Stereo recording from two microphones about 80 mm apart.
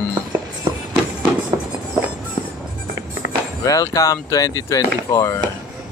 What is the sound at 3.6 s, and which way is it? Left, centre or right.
Speech, left.